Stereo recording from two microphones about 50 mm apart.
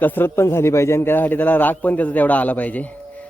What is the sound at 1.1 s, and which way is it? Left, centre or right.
Speech, left.